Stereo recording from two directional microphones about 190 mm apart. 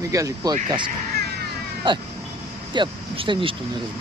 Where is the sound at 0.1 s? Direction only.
20° right (ahead or behind).